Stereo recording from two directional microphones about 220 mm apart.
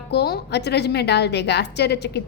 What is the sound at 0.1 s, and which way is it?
A woman's voice, 50° left (ahead or behind).